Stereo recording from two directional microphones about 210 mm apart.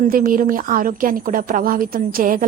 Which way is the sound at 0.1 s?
45° right (ahead or behind).